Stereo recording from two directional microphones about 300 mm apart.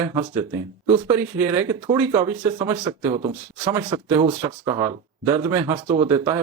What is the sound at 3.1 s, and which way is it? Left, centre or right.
Speech, centre.